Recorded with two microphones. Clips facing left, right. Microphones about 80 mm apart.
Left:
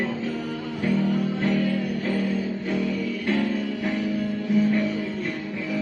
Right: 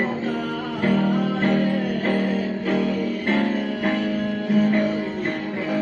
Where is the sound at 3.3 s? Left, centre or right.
Right.